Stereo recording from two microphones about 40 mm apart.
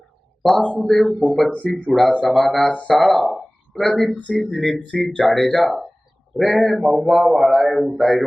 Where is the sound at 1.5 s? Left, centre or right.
Left.